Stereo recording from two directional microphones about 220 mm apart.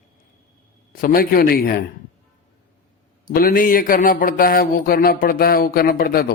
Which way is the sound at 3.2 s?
40° left (ahead or behind).